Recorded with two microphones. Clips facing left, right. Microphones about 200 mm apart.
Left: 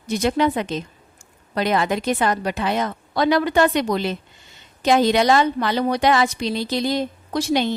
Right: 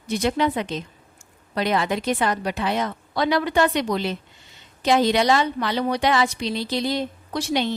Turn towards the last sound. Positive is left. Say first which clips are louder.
# left 3 dB
turn(degrees=45)  # may be behind; listen again after turning